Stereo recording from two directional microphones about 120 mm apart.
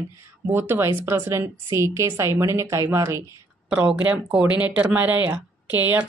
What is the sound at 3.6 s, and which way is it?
Speech, 10° right (ahead or behind).